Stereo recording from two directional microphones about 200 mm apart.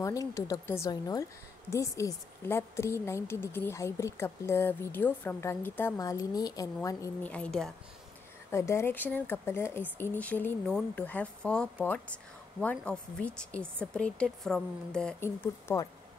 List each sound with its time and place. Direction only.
0.0 s a woman's voice: 15° left (ahead or behind)